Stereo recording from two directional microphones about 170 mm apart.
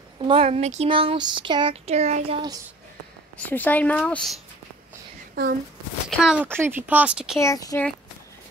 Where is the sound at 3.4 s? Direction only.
10° left (ahead or behind).